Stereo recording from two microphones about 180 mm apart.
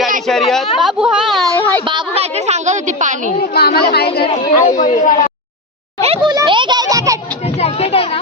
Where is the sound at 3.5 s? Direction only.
60° left (ahead or behind).